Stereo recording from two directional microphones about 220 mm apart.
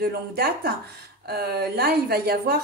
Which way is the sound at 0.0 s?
45° right (ahead or behind).